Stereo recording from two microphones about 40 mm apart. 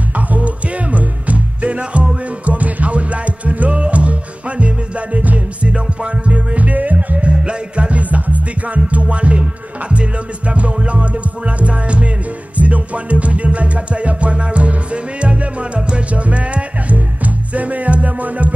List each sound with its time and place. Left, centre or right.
0.1 s music: right